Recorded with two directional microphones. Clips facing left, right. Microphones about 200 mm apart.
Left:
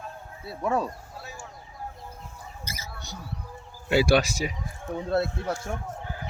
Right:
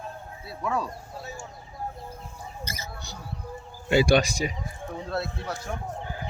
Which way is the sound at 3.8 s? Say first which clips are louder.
Right 1 dB; 5° left (ahead or behind).